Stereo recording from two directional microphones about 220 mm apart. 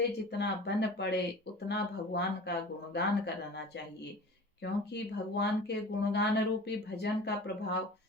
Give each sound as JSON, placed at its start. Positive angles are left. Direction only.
{"t": 0.3, "sound": "speech", "side_deg": 50}
{"t": 4.6, "sound": "speech", "side_deg": 50}